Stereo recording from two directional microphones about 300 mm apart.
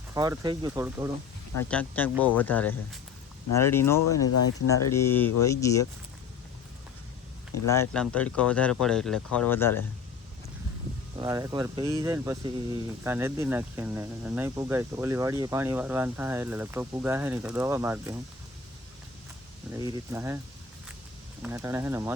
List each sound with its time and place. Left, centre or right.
0.1 s speech: centre
1.6 s speech: centre
4.0 s speech: left
4.9 s speech: centre
7.7 s speech: centre
11.2 s speech: centre
19.7 s speech: centre
21.4 s speech: centre